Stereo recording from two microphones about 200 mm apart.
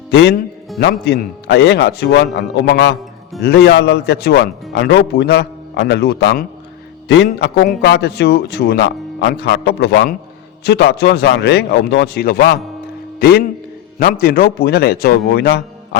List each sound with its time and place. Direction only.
0.1 s a man's voice: 55° left (ahead or behind)